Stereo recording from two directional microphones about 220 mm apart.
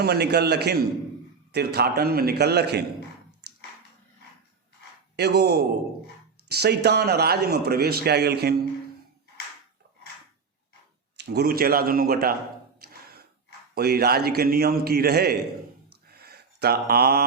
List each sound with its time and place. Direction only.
0.0 s a man's voice: 45° right (ahead or behind)
5.1 s a man's voice: 50° right (ahead or behind)
11.2 s a man's voice: 45° right (ahead or behind)
13.7 s a man's voice: 45° right (ahead or behind)
15.9 s a sound: 45° right (ahead or behind)